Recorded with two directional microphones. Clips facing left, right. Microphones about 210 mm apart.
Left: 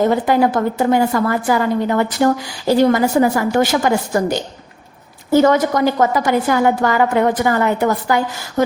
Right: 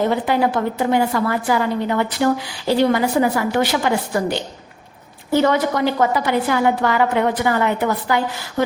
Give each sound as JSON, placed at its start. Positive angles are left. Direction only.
{"t": 0.1, "sound": "a woman's voice", "side_deg": 45}